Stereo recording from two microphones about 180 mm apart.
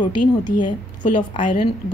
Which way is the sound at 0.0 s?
25° left (ahead or behind).